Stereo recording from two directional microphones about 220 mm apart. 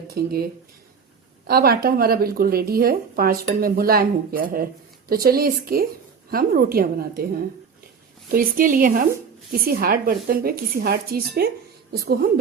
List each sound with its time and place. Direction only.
0.1 s speech: 45° right (ahead or behind)
1.5 s a woman's voice: 45° right (ahead or behind)